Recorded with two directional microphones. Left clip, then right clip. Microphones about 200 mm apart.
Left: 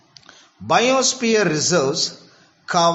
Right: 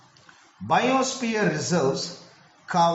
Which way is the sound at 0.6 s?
50° left (ahead or behind).